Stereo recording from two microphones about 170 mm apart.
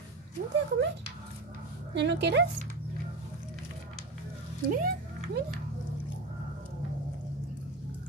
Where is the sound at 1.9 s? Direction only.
90° right.